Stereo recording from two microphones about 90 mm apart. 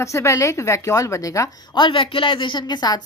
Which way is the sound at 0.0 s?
35° left (ahead or behind).